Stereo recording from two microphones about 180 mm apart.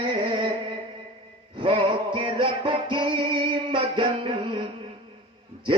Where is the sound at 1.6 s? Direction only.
30° right (ahead or behind).